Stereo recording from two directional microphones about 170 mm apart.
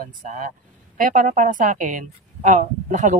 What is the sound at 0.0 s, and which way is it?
A woman's voice, 50° right (ahead or behind).